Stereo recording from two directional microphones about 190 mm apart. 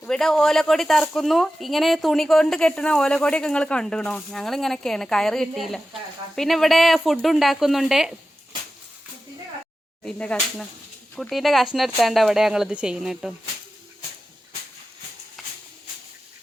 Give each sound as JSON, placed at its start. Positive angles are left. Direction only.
{"t": 0.0, "sound": "speech", "side_deg": 5}
{"t": 10.0, "sound": "speech", "side_deg": 5}
{"t": 15.4, "sound": "a sound", "side_deg": 0}